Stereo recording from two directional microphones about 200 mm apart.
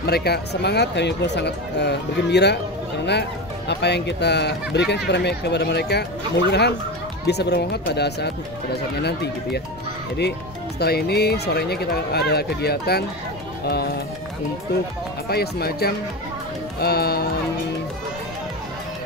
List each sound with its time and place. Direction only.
0.0 s speech: 55° left (ahead or behind)
10.8 s speech: 55° left (ahead or behind)
15.2 s speech: 50° left (ahead or behind)